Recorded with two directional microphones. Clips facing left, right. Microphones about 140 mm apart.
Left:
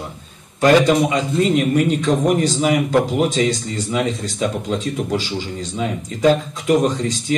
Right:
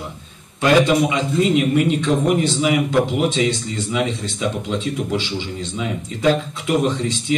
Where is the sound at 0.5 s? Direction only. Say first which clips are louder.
Left 2 dB; 40° left (ahead or behind).